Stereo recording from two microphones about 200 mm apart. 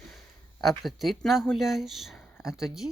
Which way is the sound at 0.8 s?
Centre (ahead or behind).